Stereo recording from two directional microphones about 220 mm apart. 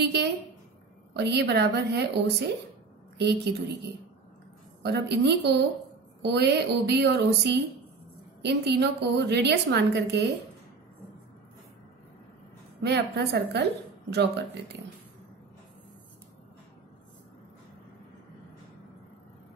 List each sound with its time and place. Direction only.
0.0 s a woman's voice: 50° right (ahead or behind)
4.8 s a woman's voice: 50° right (ahead or behind)
12.8 s a woman's voice: 50° right (ahead or behind)